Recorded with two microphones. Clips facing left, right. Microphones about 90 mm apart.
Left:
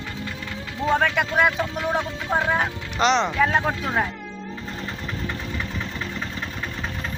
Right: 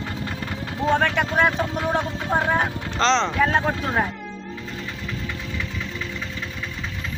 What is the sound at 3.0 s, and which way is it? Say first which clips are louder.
Speech: even; 15° left (ahead or behind).